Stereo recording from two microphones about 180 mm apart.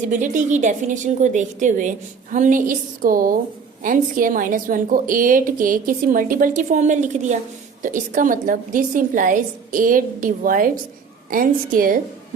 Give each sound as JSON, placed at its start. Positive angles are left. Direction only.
{"t": 0.1, "sound": "a woman's voice", "side_deg": -45}